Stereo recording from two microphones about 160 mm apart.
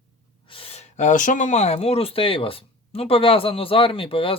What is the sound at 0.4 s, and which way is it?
Speech, 35° left (ahead or behind).